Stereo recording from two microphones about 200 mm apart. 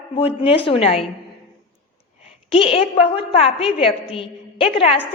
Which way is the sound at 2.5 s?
30° left (ahead or behind).